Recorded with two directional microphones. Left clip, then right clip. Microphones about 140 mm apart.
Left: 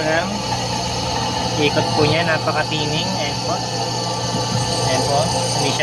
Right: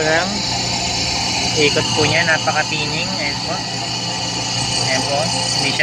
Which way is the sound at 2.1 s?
40° left (ahead or behind).